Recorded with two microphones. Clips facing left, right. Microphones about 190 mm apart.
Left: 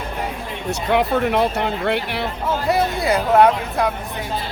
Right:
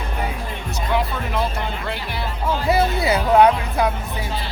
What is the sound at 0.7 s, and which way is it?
Speech, 65° left (ahead or behind).